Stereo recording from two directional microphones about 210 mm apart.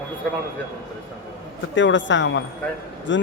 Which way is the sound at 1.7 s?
60° left (ahead or behind).